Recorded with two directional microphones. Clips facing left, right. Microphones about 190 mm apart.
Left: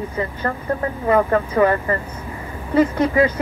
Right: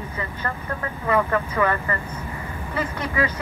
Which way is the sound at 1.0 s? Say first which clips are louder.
Left 5 dB; 35° left (ahead or behind).